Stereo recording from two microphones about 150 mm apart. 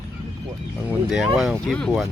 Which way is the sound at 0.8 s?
Centre (ahead or behind).